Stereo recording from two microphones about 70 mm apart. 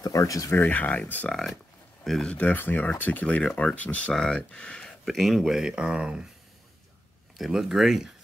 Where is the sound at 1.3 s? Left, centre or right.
Centre.